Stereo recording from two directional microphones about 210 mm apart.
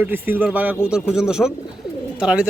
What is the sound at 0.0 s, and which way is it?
Speech, 10° right (ahead or behind).